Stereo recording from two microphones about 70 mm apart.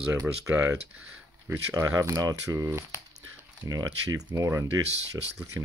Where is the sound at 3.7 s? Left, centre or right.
Right.